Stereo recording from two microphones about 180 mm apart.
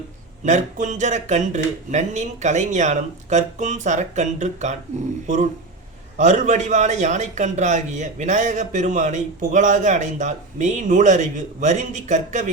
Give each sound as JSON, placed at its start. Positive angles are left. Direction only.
{"t": 0.4, "sound": "a man's voice", "side_deg": -40}